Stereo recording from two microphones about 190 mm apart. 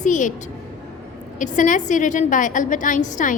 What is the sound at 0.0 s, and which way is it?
Speech, 40° left (ahead or behind).